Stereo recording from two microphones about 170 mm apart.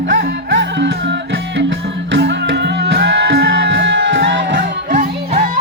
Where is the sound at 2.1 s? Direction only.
85° right.